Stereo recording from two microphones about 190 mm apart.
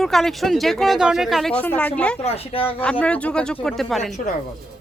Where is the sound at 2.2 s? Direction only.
30° left (ahead or behind).